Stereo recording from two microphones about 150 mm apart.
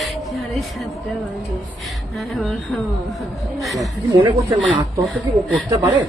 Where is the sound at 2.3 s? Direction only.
5° left (ahead or behind).